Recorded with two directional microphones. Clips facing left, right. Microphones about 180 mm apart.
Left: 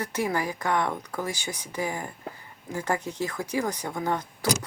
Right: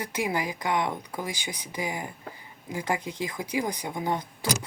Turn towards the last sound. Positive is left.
turn(degrees=-15)  # may be behind; listen again after turning